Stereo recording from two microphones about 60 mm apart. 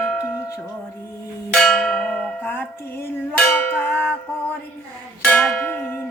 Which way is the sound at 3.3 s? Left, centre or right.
Left.